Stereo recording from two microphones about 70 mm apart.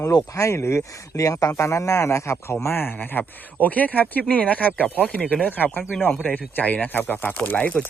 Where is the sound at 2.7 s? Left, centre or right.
Left.